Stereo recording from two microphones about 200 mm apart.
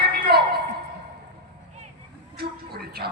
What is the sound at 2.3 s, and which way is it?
Speech, 50° right (ahead or behind).